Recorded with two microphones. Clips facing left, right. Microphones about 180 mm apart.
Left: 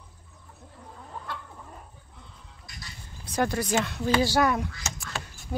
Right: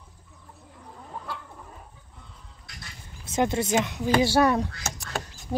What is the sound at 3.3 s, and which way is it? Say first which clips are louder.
Speech: right 2 dB; 25° right (ahead or behind).